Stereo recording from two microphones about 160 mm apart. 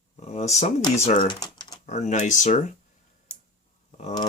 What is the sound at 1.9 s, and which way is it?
Speech, 45° left (ahead or behind).